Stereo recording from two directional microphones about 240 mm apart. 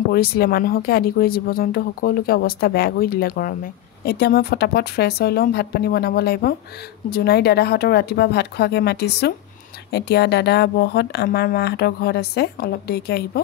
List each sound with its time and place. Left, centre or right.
0.1 s speech: left